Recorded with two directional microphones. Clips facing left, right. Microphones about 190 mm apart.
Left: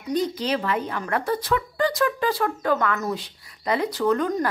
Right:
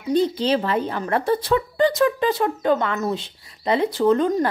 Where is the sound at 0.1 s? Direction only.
30° right (ahead or behind).